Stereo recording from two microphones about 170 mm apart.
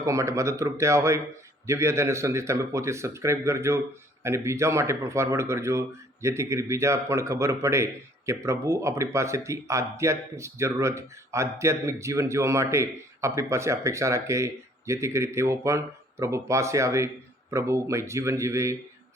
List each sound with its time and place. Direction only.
0.0 s speech: 15° right (ahead or behind)